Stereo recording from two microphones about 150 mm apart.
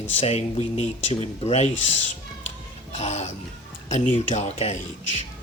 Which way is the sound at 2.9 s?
45° left (ahead or behind).